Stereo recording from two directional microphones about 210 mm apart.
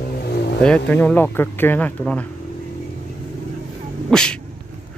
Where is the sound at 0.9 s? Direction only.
5° left (ahead or behind).